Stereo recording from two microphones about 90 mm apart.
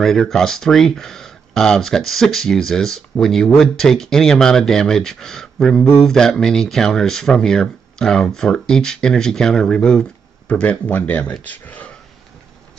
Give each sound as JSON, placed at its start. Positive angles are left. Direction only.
{"t": 0.0, "sound": "speech", "side_deg": 5}